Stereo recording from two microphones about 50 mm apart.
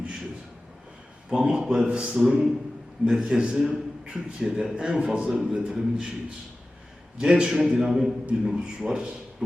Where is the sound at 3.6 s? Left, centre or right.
Centre.